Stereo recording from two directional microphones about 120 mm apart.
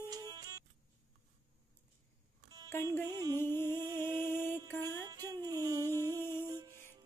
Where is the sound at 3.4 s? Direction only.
20° left (ahead or behind).